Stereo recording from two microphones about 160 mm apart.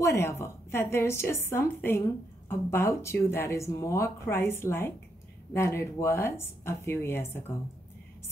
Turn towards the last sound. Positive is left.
turn(degrees=15)  # may be behind; listen again after turning